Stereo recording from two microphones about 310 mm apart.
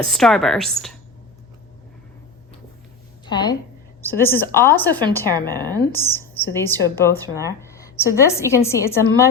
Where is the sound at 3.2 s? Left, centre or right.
Centre.